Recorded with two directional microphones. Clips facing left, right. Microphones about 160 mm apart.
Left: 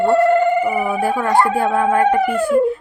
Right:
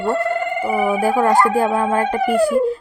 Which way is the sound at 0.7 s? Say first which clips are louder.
Right 2 dB; 10° right (ahead or behind).